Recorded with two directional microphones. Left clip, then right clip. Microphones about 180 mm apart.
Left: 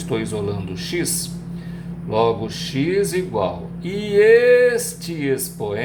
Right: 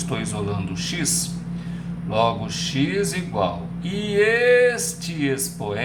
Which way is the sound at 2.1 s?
15° left (ahead or behind).